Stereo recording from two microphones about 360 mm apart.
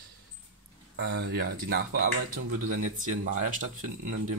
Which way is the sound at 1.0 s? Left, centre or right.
Right.